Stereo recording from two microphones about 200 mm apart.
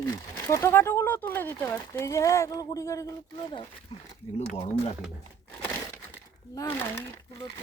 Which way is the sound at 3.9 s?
30° left (ahead or behind).